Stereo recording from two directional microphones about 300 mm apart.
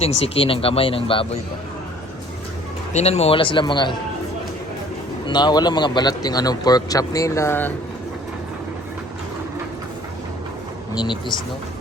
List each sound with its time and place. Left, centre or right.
0.0 s speech: centre
2.9 s speech: left
5.2 s speech: centre
10.9 s speech: centre